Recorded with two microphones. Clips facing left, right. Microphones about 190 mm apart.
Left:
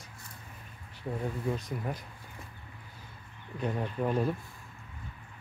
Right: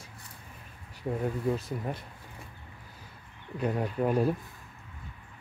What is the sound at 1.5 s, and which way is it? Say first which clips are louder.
Speech: right 3 dB; 5° right (ahead or behind).